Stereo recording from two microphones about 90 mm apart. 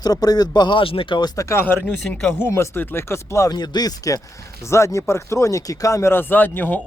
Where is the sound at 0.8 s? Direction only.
85° left; by 1.3 s 65° left (ahead or behind).